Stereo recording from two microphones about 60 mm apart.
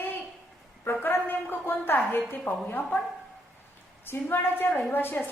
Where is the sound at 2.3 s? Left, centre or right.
Left.